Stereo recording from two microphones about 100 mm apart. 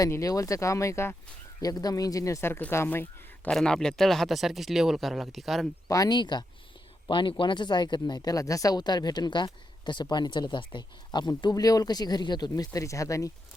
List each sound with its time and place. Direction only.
0.0 s speech: 35° left (ahead or behind)
1.6 s speech: 40° left (ahead or behind); by 3.5 s 20° left (ahead or behind)
3.5 s speech: 5° left (ahead or behind)
5.9 s speech: 40° left (ahead or behind)